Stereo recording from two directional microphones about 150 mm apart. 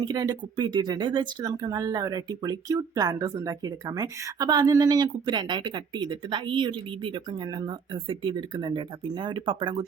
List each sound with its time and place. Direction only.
0.0 s speech: 25° right (ahead or behind)